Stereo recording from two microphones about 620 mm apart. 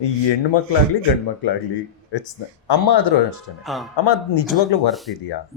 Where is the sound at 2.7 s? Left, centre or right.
Left.